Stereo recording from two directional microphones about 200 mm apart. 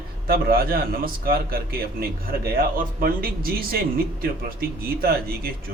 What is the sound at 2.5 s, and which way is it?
A man's voice, 45° right (ahead or behind).